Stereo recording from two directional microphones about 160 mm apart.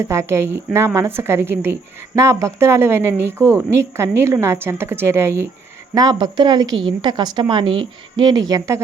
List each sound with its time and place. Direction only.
0.0 s a woman's voice: 15° right (ahead or behind)